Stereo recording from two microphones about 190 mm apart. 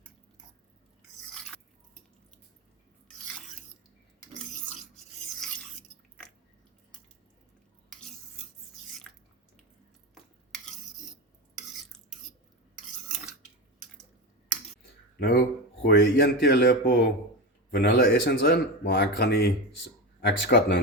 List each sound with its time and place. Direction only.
9.1 s drip: centre (ahead or behind)
15.2 s speech: 60° left (ahead or behind)